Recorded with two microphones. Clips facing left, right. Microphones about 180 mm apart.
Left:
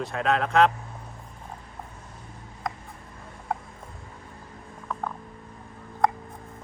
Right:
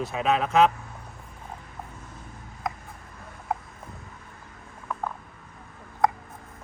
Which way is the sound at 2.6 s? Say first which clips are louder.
Right 1 dB; 5° right (ahead or behind).